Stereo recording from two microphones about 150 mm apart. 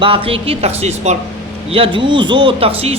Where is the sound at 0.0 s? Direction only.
35° right (ahead or behind).